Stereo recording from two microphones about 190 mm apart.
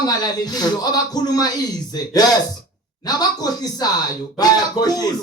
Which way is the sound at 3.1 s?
20° left (ahead or behind).